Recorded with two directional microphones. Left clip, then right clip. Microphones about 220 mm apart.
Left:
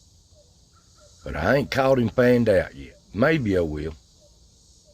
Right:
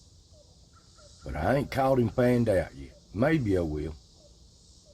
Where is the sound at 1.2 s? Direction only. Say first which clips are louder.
Left 6 dB; 35° left (ahead or behind).